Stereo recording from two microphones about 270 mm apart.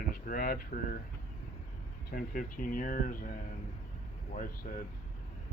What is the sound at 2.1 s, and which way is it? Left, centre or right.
Speech, left.